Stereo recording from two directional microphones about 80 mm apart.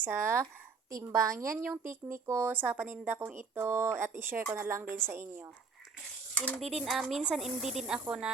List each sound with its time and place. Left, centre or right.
0.0 s a woman's voice: right
1.5 s a woman's voice: right
6.3 s speech: centre
6.6 s speech: centre